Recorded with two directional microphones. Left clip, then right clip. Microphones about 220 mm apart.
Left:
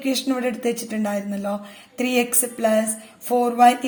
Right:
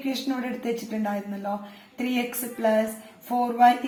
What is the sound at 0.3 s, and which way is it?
Speech, 50° left (ahead or behind).